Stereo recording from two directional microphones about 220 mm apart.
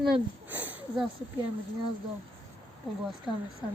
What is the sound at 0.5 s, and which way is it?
Speech, 5° right (ahead or behind).